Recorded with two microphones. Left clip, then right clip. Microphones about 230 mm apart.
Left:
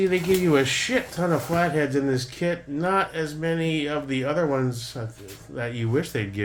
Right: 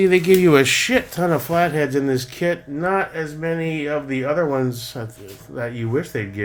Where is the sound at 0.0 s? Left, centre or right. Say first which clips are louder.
Right 8 dB; right.